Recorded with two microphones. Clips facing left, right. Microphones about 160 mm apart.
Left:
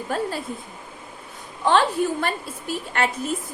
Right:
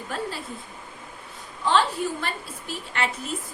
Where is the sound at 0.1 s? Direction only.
45° left (ahead or behind).